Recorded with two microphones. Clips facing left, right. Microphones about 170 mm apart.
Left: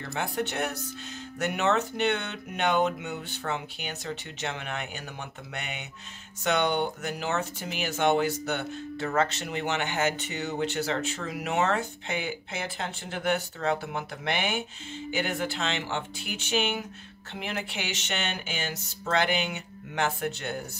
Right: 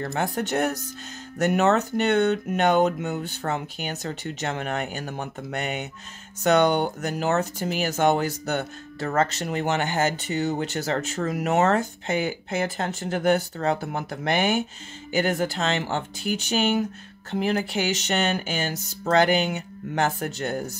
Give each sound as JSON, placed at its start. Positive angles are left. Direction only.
{"t": 0.0, "sound": "speech", "side_deg": -45}